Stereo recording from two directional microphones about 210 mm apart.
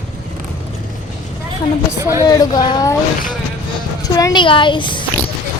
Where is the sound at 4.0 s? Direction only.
15° left (ahead or behind).